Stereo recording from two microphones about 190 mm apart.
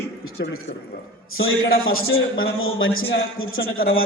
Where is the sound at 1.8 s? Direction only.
90° left.